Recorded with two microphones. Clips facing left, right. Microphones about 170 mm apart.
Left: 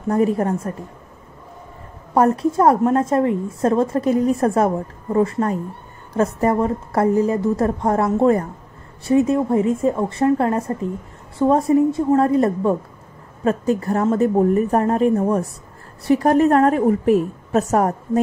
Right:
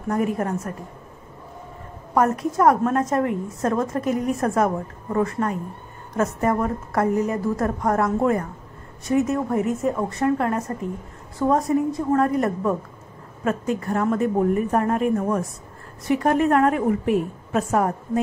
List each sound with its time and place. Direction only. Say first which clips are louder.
0.1 s a woman's voice: left 5 dB; 30° left (ahead or behind)
2.1 s a woman's voice: left 4 dB; 30° left (ahead or behind)